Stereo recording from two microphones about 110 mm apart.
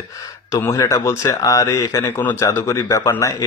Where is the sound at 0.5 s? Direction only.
25° left (ahead or behind).